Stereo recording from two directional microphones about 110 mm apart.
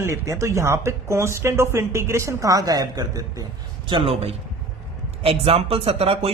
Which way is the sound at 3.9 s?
55° right (ahead or behind).